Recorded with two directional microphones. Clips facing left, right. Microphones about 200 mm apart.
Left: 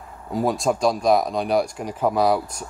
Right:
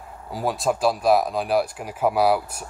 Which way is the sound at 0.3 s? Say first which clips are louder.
Left 3 dB; centre (ahead or behind).